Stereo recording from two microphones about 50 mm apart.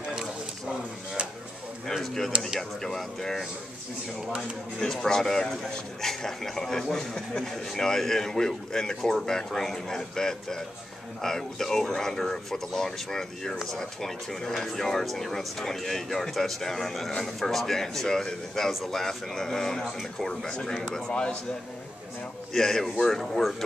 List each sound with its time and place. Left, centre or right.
1.9 s speech: centre
4.7 s speech: centre
22.5 s speech: centre